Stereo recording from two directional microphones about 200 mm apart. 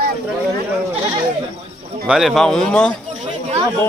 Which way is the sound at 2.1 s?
Centre (ahead or behind).